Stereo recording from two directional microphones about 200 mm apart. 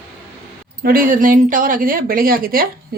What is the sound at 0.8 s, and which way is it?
A woman's voice, 45° right (ahead or behind).